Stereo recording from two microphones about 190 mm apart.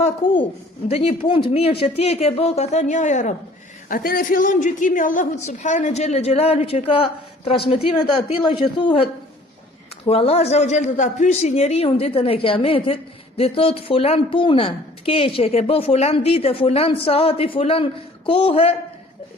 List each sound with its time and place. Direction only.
0.0 s a woman's voice: 25° left (ahead or behind)
10.1 s a man's voice: 30° left (ahead or behind)